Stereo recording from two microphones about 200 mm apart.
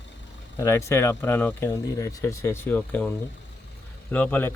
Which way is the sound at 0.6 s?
15° left (ahead or behind).